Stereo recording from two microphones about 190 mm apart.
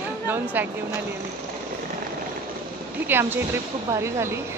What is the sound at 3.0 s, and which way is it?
Speech, 10° right (ahead or behind).